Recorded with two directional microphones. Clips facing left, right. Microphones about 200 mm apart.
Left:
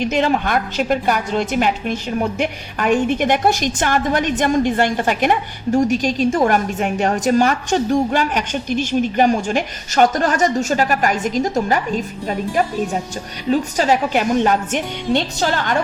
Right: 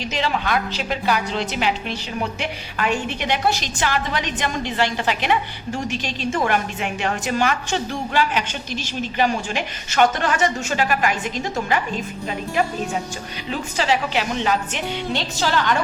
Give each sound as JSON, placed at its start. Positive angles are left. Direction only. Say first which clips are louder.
{"t": 0.0, "sound": "a woman's voice", "louder": "left 6 dB", "side_deg": 50}
{"t": 13.5, "sound": "a woman's voice", "louder": "left 6 dB", "side_deg": 45}